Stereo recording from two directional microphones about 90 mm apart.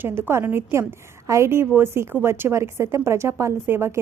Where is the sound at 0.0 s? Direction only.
25° right (ahead or behind).